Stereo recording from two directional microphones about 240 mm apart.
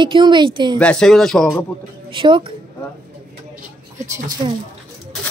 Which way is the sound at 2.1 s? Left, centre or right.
Right.